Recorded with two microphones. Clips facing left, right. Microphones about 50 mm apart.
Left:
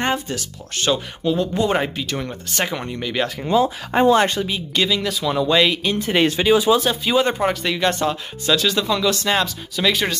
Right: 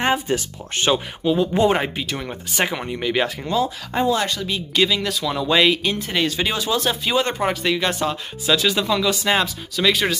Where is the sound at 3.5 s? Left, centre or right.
Centre.